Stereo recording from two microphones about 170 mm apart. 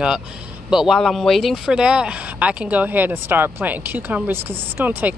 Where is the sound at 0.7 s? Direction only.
Centre (ahead or behind).